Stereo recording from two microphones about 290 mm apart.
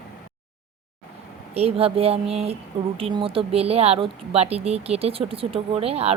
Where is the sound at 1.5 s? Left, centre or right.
Right.